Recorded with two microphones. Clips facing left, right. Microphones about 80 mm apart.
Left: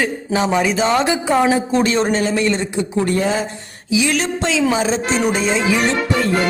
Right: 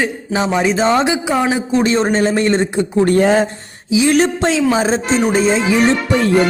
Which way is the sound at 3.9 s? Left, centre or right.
Right.